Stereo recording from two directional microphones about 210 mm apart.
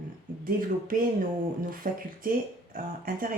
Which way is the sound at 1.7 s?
40° right (ahead or behind).